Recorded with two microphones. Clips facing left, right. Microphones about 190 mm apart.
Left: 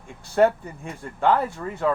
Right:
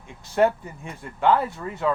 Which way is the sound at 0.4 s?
40° left (ahead or behind).